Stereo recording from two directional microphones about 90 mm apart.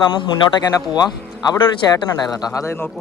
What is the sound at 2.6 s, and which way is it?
Speech, 30° left (ahead or behind).